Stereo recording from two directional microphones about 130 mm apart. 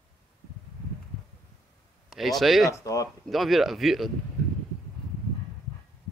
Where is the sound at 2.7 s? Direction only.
25° left (ahead or behind).